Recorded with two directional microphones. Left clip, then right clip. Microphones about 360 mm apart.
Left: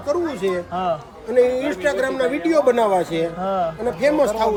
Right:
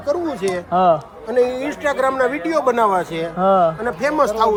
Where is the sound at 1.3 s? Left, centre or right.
Centre.